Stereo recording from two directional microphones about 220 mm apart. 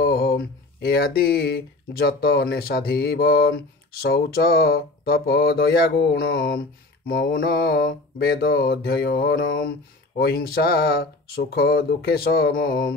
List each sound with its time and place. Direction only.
0.0 s speech: 45° left (ahead or behind)